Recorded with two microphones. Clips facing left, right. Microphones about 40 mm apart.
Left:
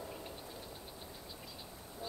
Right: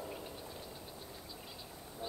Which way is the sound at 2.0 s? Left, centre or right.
Right.